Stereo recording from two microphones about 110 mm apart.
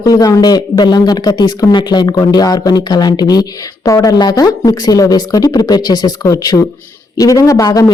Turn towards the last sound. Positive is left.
turn(degrees=30)  # may be behind; listen again after turning